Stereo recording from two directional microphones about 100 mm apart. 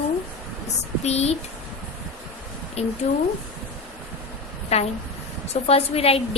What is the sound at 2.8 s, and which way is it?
Speech, 90° left.